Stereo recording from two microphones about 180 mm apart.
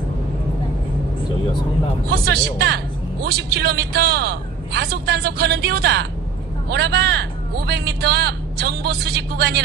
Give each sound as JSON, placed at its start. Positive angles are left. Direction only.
{"t": 2.0, "sound": "a man's voice", "side_deg": -65}